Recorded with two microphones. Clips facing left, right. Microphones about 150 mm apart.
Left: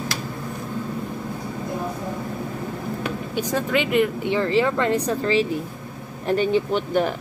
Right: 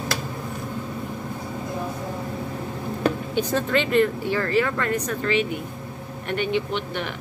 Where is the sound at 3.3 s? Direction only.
10° left (ahead or behind).